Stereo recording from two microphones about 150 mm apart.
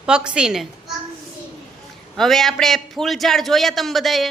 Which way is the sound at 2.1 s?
Centre (ahead or behind).